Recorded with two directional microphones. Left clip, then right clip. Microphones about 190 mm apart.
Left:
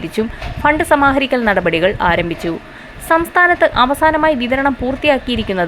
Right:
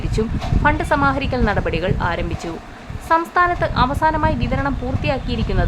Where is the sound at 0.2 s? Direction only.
15° left (ahead or behind).